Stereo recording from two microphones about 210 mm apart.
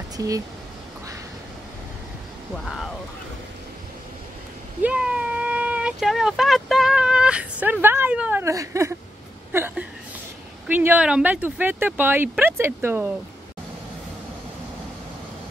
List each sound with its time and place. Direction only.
0.2 s speech: 15° right (ahead or behind)
2.5 s speech: centre (ahead or behind)
4.8 s speech: 5° right (ahead or behind)